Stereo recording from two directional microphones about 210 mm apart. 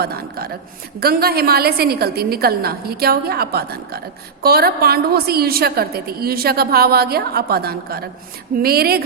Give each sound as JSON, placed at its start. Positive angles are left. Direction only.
{"t": 0.0, "sound": "a woman's voice", "side_deg": -45}